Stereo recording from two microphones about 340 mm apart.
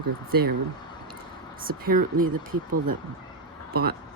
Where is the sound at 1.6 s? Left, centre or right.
Right.